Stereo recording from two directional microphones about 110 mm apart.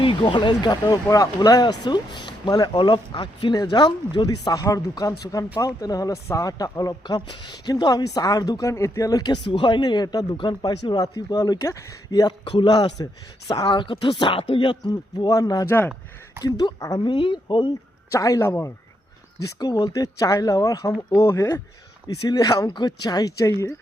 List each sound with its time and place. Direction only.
0.0 s speech: 50° left (ahead or behind); by 12.3 s 30° left (ahead or behind)
12.5 s speech: 50° left (ahead or behind); by 15.6 s 35° left (ahead or behind)
15.6 s speech: 20° left (ahead or behind)
16.6 s speech: 35° left (ahead or behind)
17.1 s speech: 50° left (ahead or behind)
18.1 s speech: 30° left (ahead or behind)